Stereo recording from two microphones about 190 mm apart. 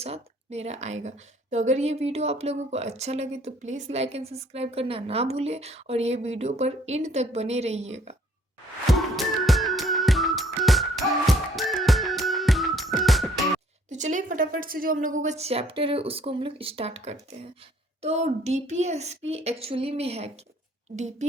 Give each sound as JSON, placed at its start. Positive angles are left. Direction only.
{"t": 0.0, "sound": "a woman's voice", "side_deg": -35}
{"t": 8.9, "sound": "music", "side_deg": 0}
{"t": 13.9, "sound": "a woman's voice", "side_deg": -40}